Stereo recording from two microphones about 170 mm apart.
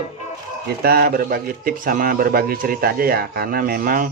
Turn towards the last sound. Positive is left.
turn(degrees=-55)  # may be behind; listen again after turning